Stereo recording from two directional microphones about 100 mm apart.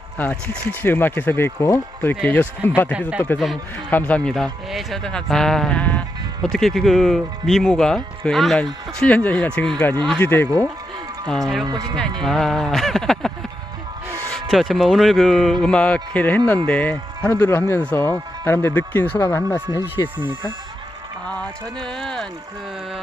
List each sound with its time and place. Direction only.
0.2 s speech: 15° left (ahead or behind)
3.3 s speech: centre (ahead or behind)
3.8 s speech: 15° left (ahead or behind)
6.5 s speech: centre (ahead or behind)
9.0 s speech: 15° left (ahead or behind)
11.3 s speech: 5° left (ahead or behind)
11.6 s speech: 50° right (ahead or behind)
12.2 s speech: centre (ahead or behind)
14.3 s speech: centre (ahead or behind); by 19.6 s 20° left (ahead or behind)
20.0 s speech: 35° left (ahead or behind)
21.2 s speech: 10° left (ahead or behind)